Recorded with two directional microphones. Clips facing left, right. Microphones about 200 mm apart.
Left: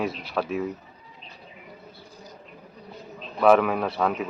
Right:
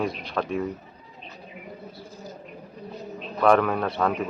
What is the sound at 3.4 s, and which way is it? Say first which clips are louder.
Speech: left 1 dB; 5° left (ahead or behind).